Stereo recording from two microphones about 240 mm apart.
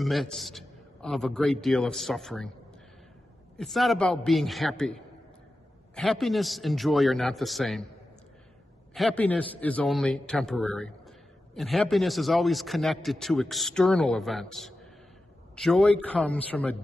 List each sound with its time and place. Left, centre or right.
0.0 s a man's voice: centre
3.5 s a man's voice: centre
5.9 s a man's voice: centre
8.9 s a man's voice: centre